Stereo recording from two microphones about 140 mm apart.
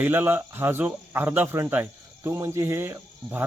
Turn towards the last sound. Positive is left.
turn(degrees=-15)  # may be behind; listen again after turning